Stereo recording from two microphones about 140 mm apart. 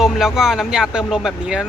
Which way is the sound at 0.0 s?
5° right (ahead or behind).